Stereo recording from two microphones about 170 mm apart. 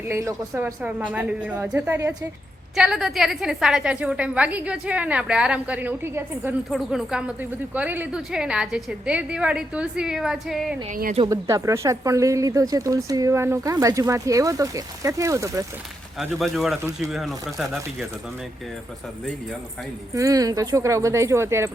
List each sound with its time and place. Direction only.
0.1 s a woman's voice: 20° right (ahead or behind)
6.7 s speech: centre (ahead or behind)
10.8 s speech: 55° right (ahead or behind)
11.3 s speech: 20° right (ahead or behind)
16.1 s speech: centre (ahead or behind)
20.1 s speech: 20° right (ahead or behind)